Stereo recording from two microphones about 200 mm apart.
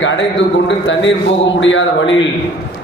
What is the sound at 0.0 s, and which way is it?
A man's voice, 70° left (ahead or behind).